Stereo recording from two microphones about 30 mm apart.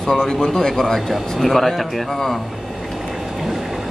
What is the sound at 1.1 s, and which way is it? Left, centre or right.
Speech, centre.